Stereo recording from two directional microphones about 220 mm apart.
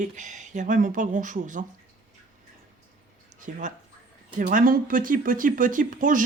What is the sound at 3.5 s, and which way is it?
Speech, 35° right (ahead or behind).